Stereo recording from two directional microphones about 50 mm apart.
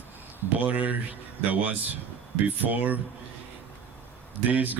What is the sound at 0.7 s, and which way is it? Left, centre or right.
Speech, right.